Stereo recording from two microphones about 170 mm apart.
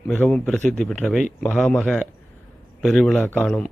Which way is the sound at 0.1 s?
10° left (ahead or behind).